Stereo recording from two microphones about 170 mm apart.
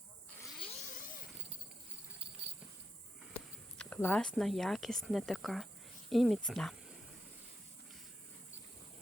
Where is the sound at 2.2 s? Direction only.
35° right (ahead or behind).